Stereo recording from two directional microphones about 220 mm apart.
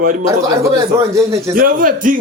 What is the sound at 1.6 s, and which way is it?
Speech, 40° right (ahead or behind).